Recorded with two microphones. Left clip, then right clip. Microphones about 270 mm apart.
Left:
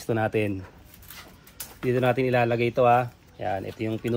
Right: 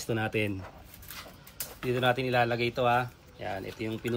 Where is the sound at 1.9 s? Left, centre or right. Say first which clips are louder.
Left 3 dB; centre.